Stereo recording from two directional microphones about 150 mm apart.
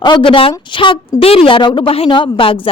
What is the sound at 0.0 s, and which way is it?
Speech, 35° left (ahead or behind).